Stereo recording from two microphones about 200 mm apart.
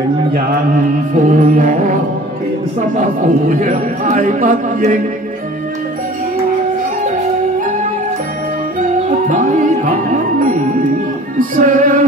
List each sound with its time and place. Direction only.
1.2 s music: 40° right (ahead or behind)
3.0 s a man's voice: 40° right (ahead or behind)
8.7 s music: 40° right (ahead or behind)